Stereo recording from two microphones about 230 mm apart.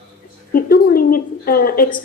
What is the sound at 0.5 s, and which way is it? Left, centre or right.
A woman's voice, left.